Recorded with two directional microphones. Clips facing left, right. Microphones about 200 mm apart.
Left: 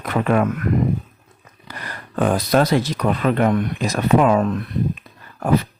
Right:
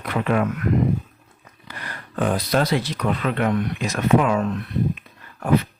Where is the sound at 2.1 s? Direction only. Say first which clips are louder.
Left 4 dB; 50° left (ahead or behind).